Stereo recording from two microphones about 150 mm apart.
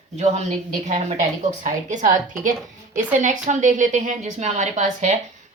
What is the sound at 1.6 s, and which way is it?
A woman's voice, 55° right (ahead or behind).